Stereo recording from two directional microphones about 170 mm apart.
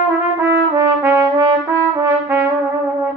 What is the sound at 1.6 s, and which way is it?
Trumpet, 15° right (ahead or behind).